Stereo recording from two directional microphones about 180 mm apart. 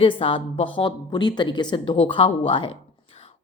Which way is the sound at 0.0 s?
30° left (ahead or behind).